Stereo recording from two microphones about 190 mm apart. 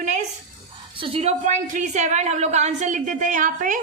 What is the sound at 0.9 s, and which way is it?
A woman's voice, 30° right (ahead or behind).